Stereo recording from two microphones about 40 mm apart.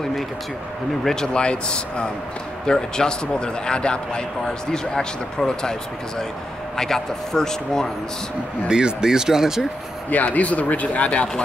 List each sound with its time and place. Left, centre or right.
1.3 s speech: left
8.6 s speech: centre
10.0 s speech: left